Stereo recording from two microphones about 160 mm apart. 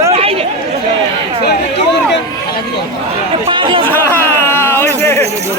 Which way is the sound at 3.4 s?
30° right (ahead or behind).